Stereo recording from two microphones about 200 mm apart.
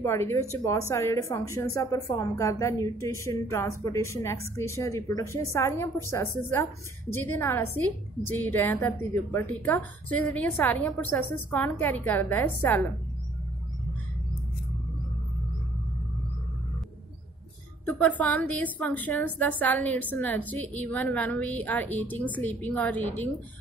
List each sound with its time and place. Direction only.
0.0 s a woman's voice: 15° left (ahead or behind)
17.8 s a woman's voice: 10° left (ahead or behind)